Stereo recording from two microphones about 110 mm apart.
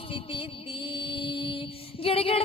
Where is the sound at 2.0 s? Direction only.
60° left (ahead or behind).